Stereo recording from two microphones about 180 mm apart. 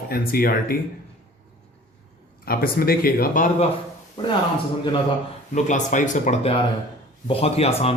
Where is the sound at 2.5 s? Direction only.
55° left (ahead or behind).